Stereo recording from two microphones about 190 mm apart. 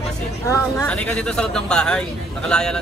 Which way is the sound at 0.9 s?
5° left (ahead or behind).